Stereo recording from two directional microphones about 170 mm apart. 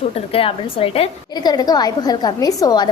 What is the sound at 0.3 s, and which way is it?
A child's voice, 35° left (ahead or behind).